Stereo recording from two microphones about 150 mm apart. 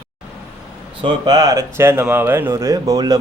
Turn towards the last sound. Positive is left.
turn(degrees=-25)  # may be behind; listen again after turning